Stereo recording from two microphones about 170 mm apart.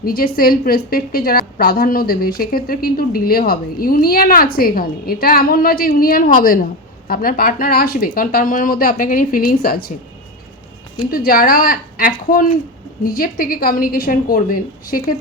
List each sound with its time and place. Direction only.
0.0 s a woman's voice: 60° left (ahead or behind)
11.1 s a woman's voice: 60° left (ahead or behind)